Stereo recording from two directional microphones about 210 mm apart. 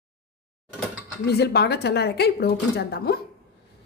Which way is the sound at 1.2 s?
50° left (ahead or behind).